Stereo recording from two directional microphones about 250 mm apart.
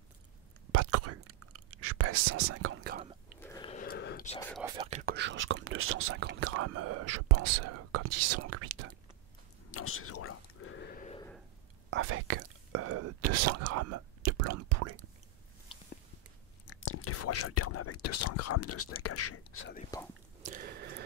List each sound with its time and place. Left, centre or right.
0.7 s whispering: right
3.3 s a sound: centre
3.7 s a sound: left
4.4 s speech: centre
4.6 s speech: right
5.1 s speech: right
9.7 s whispering: left
10.9 s a sound: left
12.0 s whispering: right
16.8 s speech: left
19.9 s speech: centre
20.4 s a sound: right